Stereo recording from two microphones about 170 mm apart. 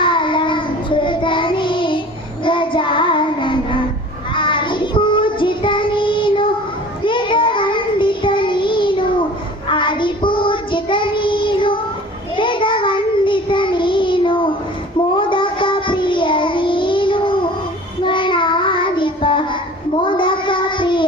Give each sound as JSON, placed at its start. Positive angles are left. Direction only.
{"t": 0.0, "sound": "child singing", "side_deg": 30}